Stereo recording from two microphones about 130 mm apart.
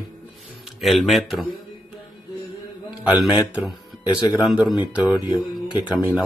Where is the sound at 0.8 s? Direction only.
Centre (ahead or behind).